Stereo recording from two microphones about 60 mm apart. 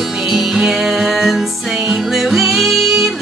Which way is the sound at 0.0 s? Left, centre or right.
Centre.